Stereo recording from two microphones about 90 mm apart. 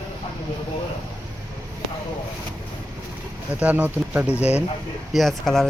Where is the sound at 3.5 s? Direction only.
20° right (ahead or behind).